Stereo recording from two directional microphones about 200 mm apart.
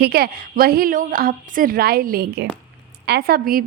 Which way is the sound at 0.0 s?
50° right (ahead or behind).